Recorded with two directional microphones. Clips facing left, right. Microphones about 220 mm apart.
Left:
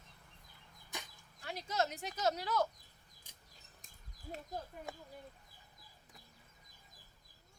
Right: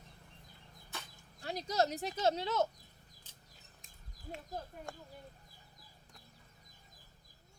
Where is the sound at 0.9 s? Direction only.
15° left (ahead or behind).